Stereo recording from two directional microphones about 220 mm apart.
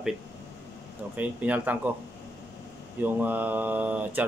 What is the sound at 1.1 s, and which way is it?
Speech, 5° right (ahead or behind).